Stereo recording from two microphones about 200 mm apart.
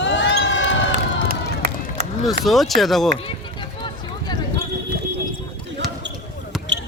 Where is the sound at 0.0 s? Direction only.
65° left (ahead or behind).